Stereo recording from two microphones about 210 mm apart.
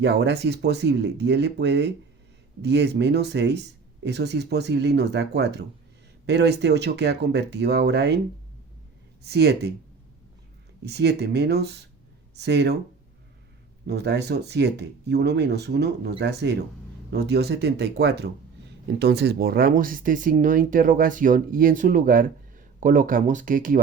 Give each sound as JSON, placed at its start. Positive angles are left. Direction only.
{"t": 0.0, "sound": "speech", "side_deg": -55}
{"t": 9.2, "sound": "speech", "side_deg": -50}
{"t": 10.8, "sound": "speech", "side_deg": -50}
{"t": 13.8, "sound": "speech", "side_deg": -55}